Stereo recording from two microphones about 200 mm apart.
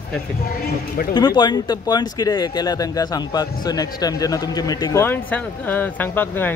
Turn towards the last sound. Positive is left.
turn(degrees=10)  # may be behind; listen again after turning